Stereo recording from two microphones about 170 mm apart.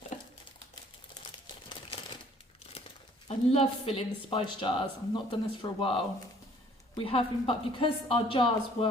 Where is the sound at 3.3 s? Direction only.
35° left (ahead or behind).